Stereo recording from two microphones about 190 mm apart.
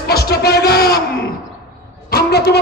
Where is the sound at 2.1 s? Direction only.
60° left (ahead or behind).